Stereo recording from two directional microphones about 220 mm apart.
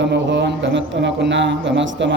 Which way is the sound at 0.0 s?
55° right (ahead or behind).